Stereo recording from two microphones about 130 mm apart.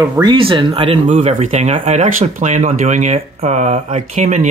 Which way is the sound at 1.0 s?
60° right (ahead or behind).